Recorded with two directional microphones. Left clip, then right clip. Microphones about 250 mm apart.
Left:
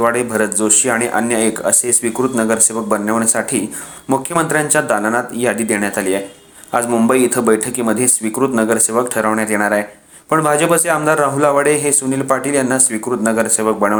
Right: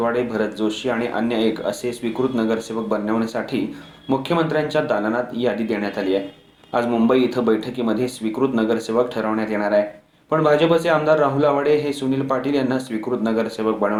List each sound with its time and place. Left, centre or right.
0.0 s a man's voice: left